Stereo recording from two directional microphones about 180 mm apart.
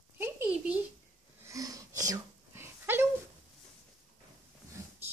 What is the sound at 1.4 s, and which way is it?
Sneeze, 20° right (ahead or behind).